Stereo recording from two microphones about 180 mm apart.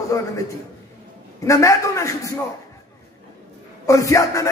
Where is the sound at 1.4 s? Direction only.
15° left (ahead or behind).